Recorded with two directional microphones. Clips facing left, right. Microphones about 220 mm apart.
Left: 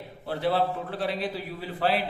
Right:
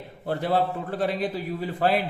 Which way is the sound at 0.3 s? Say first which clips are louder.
Right 1 dB; 45° right (ahead or behind).